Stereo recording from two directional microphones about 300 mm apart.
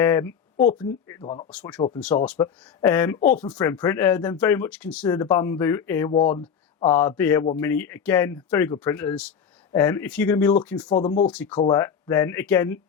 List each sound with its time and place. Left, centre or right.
0.0 s speech: centre
1.5 s speech: centre
10.9 s speech: left
11.3 s speech: centre